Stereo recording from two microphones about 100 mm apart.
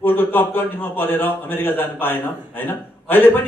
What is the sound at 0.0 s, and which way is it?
A man's voice, 20° left (ahead or behind).